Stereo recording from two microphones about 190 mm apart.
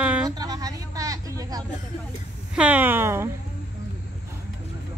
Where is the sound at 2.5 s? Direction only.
5° right (ahead or behind).